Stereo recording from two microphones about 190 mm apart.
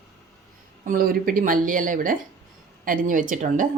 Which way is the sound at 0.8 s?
50° right (ahead or behind).